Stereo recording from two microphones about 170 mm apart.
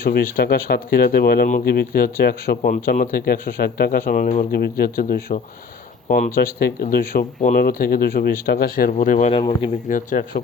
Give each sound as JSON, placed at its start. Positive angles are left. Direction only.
{"t": 0.0, "sound": "speech", "side_deg": 65}
{"t": 4.5, "sound": "speech", "side_deg": 65}
{"t": 9.3, "sound": "speech", "side_deg": 30}
{"t": 9.9, "sound": "speech", "side_deg": 50}